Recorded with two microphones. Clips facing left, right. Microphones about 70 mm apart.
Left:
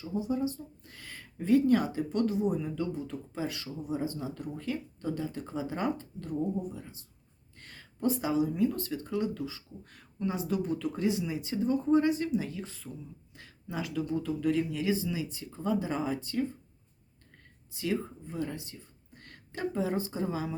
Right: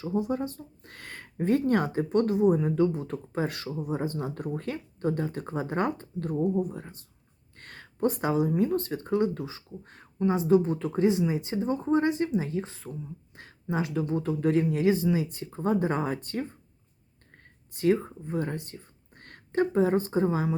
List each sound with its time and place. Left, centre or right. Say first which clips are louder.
0.0 s speech: right 3 dB; right
17.7 s speech: right 8 dB; right